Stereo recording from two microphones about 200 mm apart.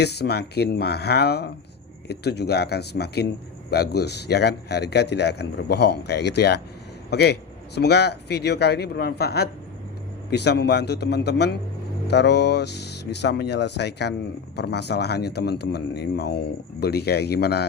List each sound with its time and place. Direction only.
0.0 s a man's voice: 55° left (ahead or behind)